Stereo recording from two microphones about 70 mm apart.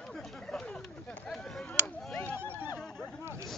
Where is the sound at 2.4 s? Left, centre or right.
Right.